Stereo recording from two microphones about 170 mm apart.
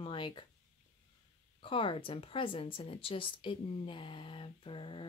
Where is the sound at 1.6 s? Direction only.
30° left (ahead or behind).